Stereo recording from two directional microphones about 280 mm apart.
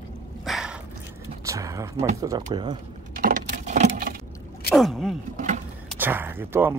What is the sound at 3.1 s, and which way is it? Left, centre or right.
Keys jangling, right.